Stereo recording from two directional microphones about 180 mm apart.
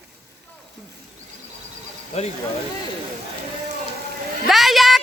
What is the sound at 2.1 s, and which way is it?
Speech, 35° left (ahead or behind).